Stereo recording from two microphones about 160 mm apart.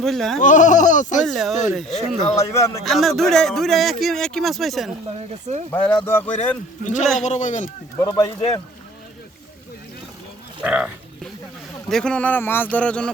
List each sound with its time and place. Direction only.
0.0 s speech: centre (ahead or behind)
0.4 s speech: 50° left (ahead or behind)
1.2 s speech: centre (ahead or behind)
2.3 s speech: 20° left (ahead or behind)
2.8 s speech: centre (ahead or behind)
6.8 s speech: 50° left (ahead or behind)
7.9 s speech: 20° left (ahead or behind)
10.6 s speech: 10° right (ahead or behind)
11.9 s speech: 5° left (ahead or behind)